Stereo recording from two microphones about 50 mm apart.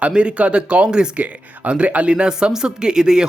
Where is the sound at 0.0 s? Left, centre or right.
Right.